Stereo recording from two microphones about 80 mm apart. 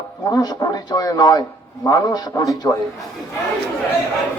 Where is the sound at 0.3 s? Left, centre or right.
Left.